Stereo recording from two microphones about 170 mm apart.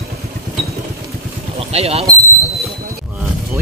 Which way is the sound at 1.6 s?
35° right (ahead or behind).